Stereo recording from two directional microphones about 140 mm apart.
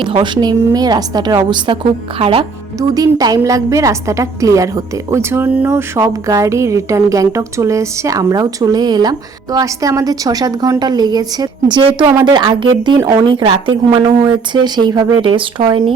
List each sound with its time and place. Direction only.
0.0 s a woman's voice: 35° right (ahead or behind)
2.9 s a woman's voice: 25° right (ahead or behind)
13.0 s speech: 20° right (ahead or behind)
13.2 s a woman's voice: 35° right (ahead or behind)